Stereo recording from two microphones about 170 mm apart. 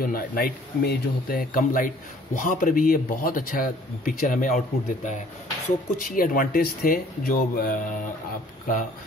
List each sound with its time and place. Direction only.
0.0 s a man's voice: 60° left (ahead or behind)